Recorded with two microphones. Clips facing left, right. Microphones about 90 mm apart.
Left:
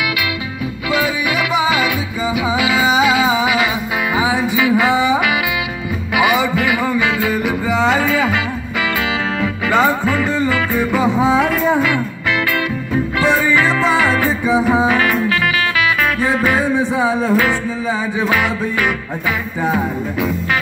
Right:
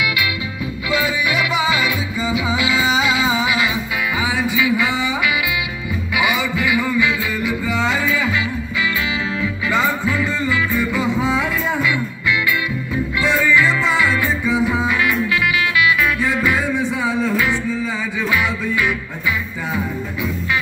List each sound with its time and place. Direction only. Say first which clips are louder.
0.8 s music: left 2 dB; 45° left (ahead or behind)
4.1 s music: left 5 dB; 35° left (ahead or behind)
4.6 s a sound: left 5 dB; 50° left (ahead or behind)
6.1 s music: left 5 dB; 55° left (ahead or behind)
14.5 s music: left 5 dB; 40° left (ahead or behind)
14.9 s music: left 3 dB; 50° left (ahead or behind)